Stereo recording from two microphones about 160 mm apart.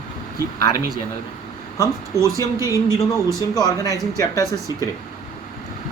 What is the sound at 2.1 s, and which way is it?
Speech, 20° right (ahead or behind).